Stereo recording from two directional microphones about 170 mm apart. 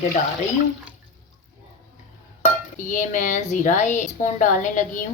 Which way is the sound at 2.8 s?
50° left (ahead or behind).